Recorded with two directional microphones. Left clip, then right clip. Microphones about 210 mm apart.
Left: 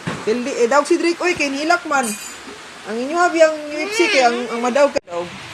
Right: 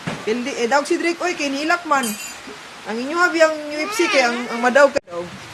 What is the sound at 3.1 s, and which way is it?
Speech, 15° right (ahead or behind).